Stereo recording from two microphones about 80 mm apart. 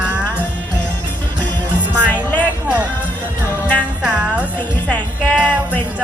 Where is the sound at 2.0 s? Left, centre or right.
Centre.